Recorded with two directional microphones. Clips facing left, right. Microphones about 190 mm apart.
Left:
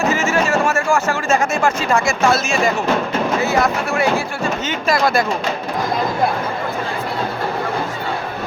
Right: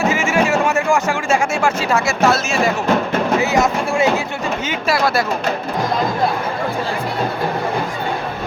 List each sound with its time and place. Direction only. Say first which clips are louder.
0.1 s a sound: right 1 dB; 10° right (ahead or behind)
3.4 s speech: right 1 dB; 20° right (ahead or behind)
4.9 s speech: left 1 dB; 5° right (ahead or behind)